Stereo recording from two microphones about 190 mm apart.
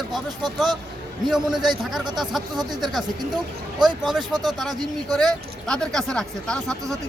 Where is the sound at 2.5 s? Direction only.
20° right (ahead or behind).